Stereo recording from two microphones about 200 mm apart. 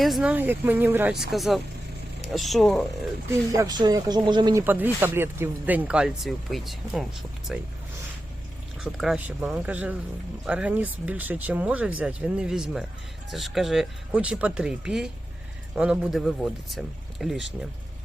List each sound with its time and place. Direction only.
0.0 s speech: centre (ahead or behind)
3.2 s speech: 15° right (ahead or behind)
4.6 s speech: 10° right (ahead or behind)
8.8 s speech: centre (ahead or behind)